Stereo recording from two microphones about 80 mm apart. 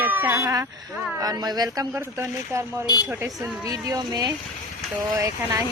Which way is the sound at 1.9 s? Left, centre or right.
Right.